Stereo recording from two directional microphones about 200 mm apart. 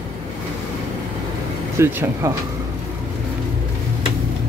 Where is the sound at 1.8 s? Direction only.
10° right (ahead or behind).